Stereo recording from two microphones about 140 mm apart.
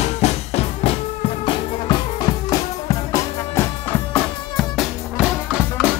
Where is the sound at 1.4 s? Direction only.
35° left (ahead or behind).